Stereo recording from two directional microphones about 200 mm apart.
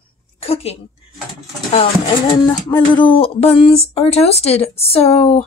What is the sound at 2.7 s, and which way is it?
A woman's voice, 20° left (ahead or behind).